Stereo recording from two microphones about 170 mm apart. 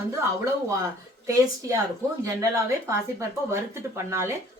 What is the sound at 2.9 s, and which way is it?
A woman's voice, 15° right (ahead or behind).